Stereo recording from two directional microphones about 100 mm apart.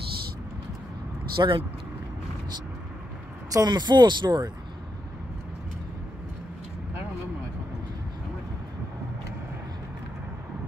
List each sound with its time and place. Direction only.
1.3 s speech: 55° right (ahead or behind)
3.5 s speech: 45° right (ahead or behind)